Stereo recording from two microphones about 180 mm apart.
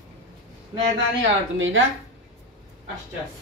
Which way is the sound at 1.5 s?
90° right.